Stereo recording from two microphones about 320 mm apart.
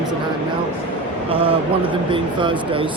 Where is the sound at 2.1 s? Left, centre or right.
Centre.